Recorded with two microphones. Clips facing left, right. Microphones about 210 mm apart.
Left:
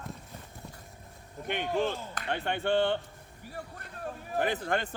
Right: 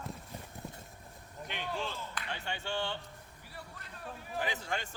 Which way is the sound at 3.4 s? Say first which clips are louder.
Left 8 dB; 45° left (ahead or behind).